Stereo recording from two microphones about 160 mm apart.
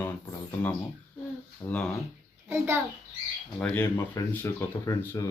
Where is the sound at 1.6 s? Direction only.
20° left (ahead or behind).